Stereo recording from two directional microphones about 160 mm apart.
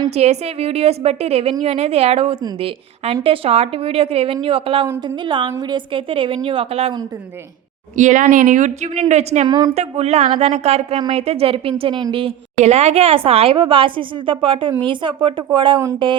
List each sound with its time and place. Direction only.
0.1 s a woman's voice: 40° right (ahead or behind)
7.9 s a woman's voice: 50° right (ahead or behind)
9.5 s a woman's voice: 25° right (ahead or behind)
9.7 s a woman's voice: 40° right (ahead or behind)